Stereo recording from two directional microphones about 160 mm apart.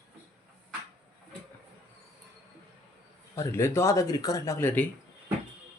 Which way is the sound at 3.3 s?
15° left (ahead or behind).